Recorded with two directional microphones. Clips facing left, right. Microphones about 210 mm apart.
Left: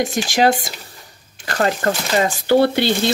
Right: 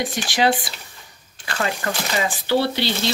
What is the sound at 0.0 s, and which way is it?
Speech, 45° left (ahead or behind).